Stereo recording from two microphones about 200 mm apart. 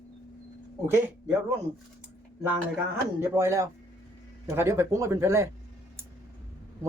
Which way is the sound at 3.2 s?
15° right (ahead or behind).